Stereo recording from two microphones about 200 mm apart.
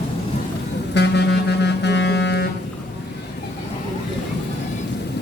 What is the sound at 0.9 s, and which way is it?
Saxophone, 55° left (ahead or behind).